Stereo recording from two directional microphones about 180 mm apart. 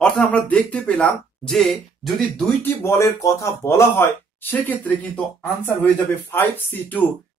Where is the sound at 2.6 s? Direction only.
15° left (ahead or behind).